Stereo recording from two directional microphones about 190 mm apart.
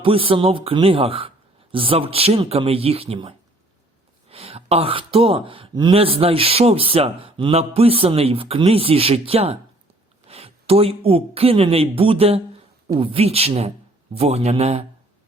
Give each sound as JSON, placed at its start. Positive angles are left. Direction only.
{"t": 0.0, "sound": "speech", "side_deg": -30}